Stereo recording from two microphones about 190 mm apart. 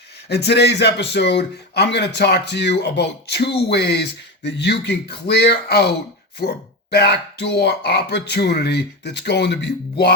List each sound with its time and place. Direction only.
0.3 s a man's voice: 60° left (ahead or behind)
6.9 s a man's voice: 60° left (ahead or behind)